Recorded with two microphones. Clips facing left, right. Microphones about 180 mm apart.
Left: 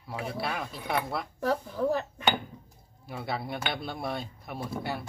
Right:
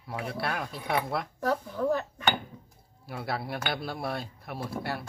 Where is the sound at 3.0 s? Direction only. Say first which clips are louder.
Even; 5° right (ahead or behind).